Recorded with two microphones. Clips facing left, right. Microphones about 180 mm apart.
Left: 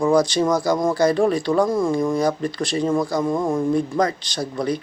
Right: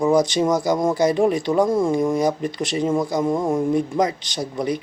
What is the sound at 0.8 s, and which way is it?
Speech, 15° right (ahead or behind).